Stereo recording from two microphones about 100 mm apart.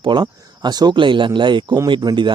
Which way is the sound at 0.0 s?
50° right (ahead or behind).